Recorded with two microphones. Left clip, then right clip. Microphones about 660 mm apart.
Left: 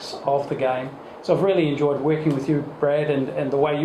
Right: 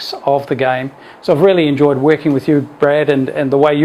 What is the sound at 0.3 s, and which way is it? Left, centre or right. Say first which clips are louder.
Speech: right 8 dB; right.